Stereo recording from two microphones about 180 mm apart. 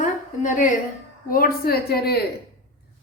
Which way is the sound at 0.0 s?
45° left (ahead or behind).